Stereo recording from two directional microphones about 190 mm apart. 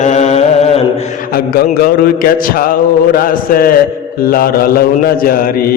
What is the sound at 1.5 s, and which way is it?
Mantra, 50° left (ahead or behind).